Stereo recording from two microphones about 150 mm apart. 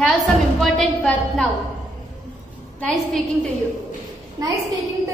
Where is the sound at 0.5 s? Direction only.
Centre (ahead or behind).